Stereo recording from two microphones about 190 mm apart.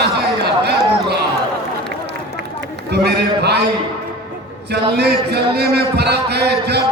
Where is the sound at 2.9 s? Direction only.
60° right (ahead or behind).